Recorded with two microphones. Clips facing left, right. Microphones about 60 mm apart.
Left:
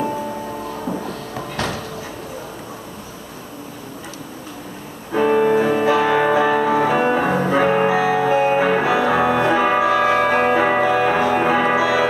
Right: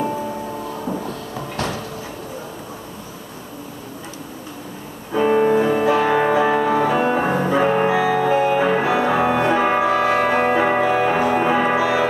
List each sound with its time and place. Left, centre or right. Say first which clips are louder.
1.0 s a sound: even; left
5.1 s music: even; left
5.9 s music: left 1 dB; left
7.2 s music: left 1 dB; centre
7.5 s music: left 1 dB; left
11.7 s music: left 1 dB; left